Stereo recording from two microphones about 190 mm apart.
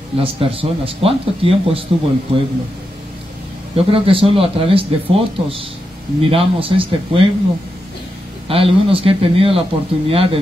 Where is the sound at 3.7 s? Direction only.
30° right (ahead or behind).